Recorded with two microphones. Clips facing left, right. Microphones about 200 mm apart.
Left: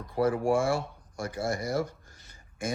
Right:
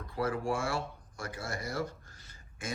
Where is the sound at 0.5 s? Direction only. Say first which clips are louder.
Left 7 dB; 15° left (ahead or behind).